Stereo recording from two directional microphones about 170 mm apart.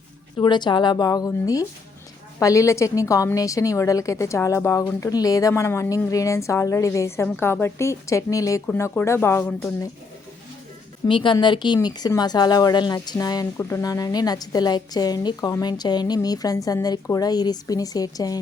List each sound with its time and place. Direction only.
0.3 s a woman's voice: 25° left (ahead or behind)
11.1 s a woman's voice: 30° left (ahead or behind)